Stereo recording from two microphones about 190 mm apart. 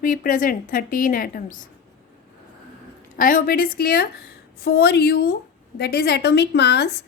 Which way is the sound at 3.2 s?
45° left (ahead or behind).